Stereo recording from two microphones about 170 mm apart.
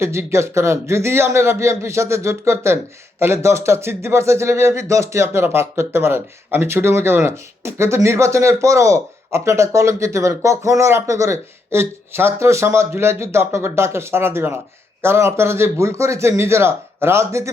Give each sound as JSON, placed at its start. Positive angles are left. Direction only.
{"t": 0.0, "sound": "a man's voice", "side_deg": -15}